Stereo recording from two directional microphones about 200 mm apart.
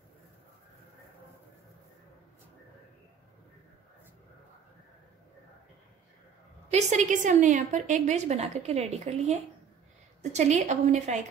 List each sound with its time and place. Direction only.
6.7 s a woman's voice: 35° right (ahead or behind)